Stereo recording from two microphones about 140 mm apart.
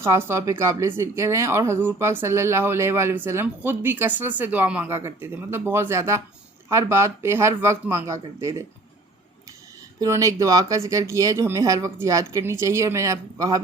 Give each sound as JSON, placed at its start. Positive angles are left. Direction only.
{"t": 0.0, "sound": "speech", "side_deg": -15}
{"t": 10.0, "sound": "speech", "side_deg": -25}